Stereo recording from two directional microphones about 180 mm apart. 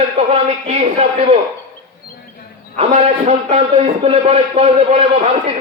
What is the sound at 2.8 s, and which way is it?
A man's voice, 35° right (ahead or behind).